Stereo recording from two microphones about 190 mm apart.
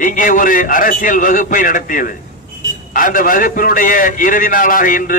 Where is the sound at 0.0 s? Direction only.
45° left (ahead or behind).